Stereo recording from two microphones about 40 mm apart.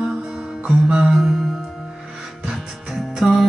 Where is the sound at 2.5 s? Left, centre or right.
Centre.